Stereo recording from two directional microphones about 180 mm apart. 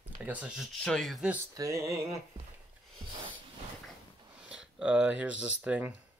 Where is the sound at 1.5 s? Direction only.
20° right (ahead or behind).